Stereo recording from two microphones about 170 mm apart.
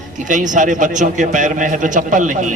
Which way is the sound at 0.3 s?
50° right (ahead or behind).